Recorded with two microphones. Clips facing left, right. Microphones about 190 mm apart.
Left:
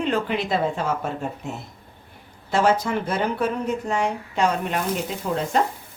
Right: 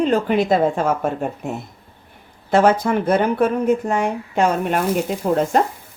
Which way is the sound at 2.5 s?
55° right (ahead or behind).